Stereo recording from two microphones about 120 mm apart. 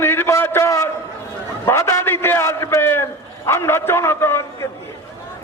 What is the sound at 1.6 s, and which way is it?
A man's voice, 25° left (ahead or behind).